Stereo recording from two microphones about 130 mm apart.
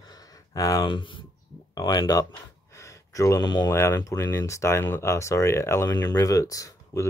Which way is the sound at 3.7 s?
20° left (ahead or behind).